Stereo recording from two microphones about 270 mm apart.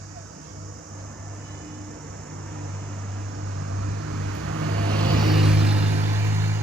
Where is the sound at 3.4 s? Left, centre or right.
Right.